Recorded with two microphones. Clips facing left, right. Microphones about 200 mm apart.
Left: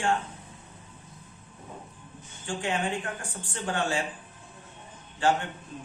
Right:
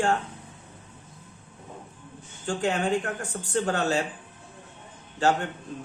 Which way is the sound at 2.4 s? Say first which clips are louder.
Right 4 dB; 40° right (ahead or behind).